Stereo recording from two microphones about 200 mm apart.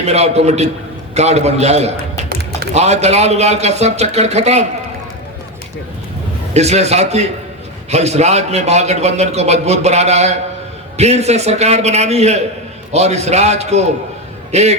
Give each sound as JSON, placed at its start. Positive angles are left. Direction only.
{"t": 0.0, "sound": "a man's voice", "side_deg": -30}
{"t": 6.5, "sound": "a man's voice", "side_deg": -35}